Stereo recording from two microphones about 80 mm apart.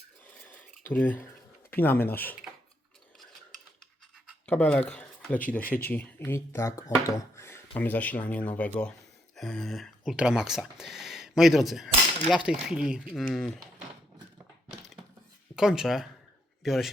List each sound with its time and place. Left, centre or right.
0.4 s a sound: left
1.7 s speech: left
4.4 s speech: centre
8.8 s speech: centre
10.0 s speech: centre
15.5 s speech: centre